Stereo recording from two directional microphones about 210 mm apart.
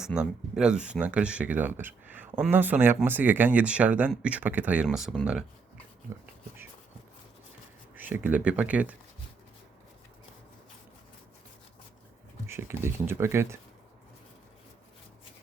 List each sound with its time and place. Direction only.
0.0 s speech: centre (ahead or behind)
7.9 s speech: 10° right (ahead or behind)
12.5 s speech: 10° right (ahead or behind)